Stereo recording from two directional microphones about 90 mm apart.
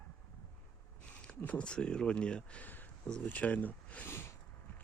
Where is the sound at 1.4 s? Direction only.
15° left (ahead or behind).